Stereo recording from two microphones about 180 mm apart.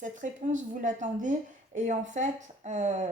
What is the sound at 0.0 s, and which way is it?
Speech, 45° right (ahead or behind).